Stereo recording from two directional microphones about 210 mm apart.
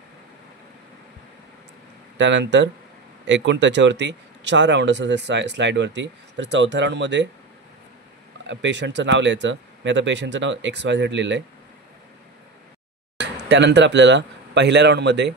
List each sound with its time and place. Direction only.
2.1 s speech: 60° right (ahead or behind)
8.5 s speech: 60° right (ahead or behind)
13.2 s speech: 55° right (ahead or behind)